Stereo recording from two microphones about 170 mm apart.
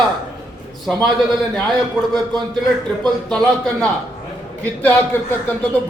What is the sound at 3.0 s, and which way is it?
A man's voice, 5° left (ahead or behind).